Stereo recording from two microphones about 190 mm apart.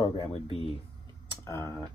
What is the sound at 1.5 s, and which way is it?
Speech, 15° left (ahead or behind).